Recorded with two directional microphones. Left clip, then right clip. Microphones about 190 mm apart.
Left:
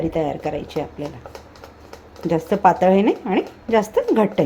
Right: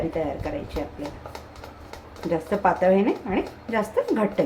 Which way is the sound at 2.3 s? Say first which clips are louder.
Left 6 dB; 50° left (ahead or behind).